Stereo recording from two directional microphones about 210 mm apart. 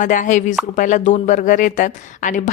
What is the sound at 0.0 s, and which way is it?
Speech, 35° left (ahead or behind).